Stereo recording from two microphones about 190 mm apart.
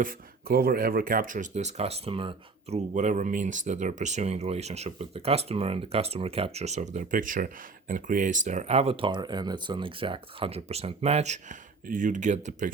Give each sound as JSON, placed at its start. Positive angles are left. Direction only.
{"t": 0.0, "sound": "speech", "side_deg": -50}